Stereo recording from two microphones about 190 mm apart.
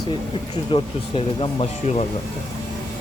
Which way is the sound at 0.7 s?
30° left (ahead or behind).